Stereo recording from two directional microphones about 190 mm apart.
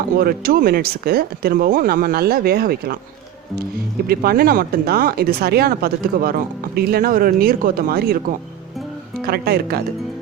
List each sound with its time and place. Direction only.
0.2 s speech: 50° right (ahead or behind)
4.0 s speech: 50° right (ahead or behind)